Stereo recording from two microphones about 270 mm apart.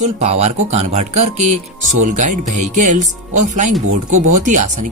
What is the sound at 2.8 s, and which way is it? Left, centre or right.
Speech, right.